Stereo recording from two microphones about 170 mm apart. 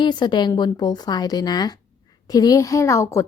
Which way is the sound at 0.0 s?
25° left (ahead or behind).